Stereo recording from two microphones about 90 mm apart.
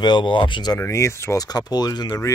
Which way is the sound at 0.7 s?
30° left (ahead or behind).